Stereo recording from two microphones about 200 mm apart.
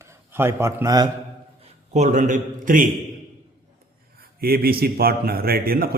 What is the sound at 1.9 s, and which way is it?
A man's voice, 35° right (ahead or behind).